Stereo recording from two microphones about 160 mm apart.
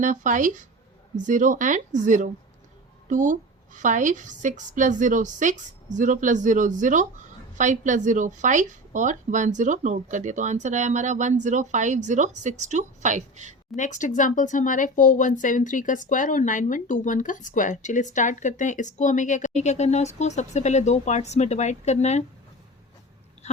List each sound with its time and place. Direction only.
0.0 s a woman's voice: 50° right (ahead or behind)
13.7 s speech: 50° left (ahead or behind)